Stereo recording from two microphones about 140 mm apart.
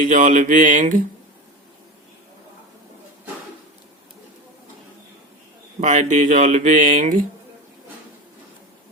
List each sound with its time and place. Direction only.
0.0 s speech: 65° right (ahead or behind)
5.8 s speech: 60° right (ahead or behind)